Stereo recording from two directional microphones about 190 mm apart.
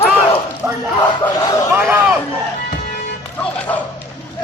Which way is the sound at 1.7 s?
10° right (ahead or behind).